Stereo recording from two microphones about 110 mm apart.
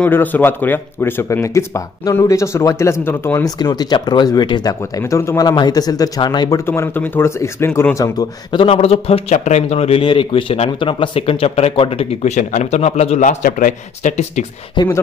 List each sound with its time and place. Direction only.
0.0 s speech: 15° left (ahead or behind)
3.4 s speech: 35° left (ahead or behind)
5.1 s speech: 25° left (ahead or behind)
5.4 s speech: 35° left (ahead or behind)
6.6 s speech: 20° left (ahead or behind)
8.5 s speech: 55° left (ahead or behind); by 14.4 s 90° left
14.8 s speech: 45° left (ahead or behind)